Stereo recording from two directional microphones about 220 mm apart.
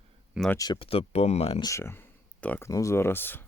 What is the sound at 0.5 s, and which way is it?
Speech, 20° left (ahead or behind).